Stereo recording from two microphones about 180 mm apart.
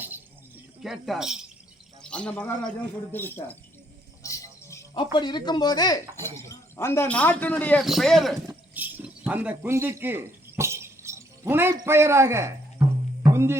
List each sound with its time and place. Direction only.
0.8 s a man's voice: centre (ahead or behind)
4.2 s music: 15° left (ahead or behind)
5.1 s speech: 25° left (ahead or behind); by 8.4 s centre (ahead or behind)
8.4 s a sound: 10° right (ahead or behind)
13.3 s speech: 15° right (ahead or behind)